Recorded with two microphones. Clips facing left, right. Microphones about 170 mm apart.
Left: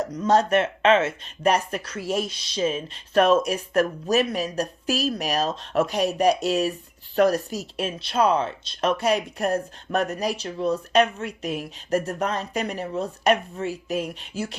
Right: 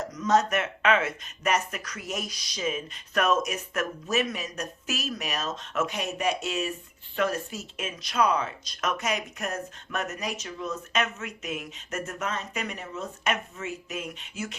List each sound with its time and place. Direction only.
0.0 s speech: 35° left (ahead or behind)